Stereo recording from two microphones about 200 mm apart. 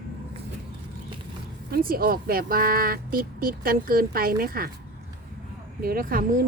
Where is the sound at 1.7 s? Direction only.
45° right (ahead or behind).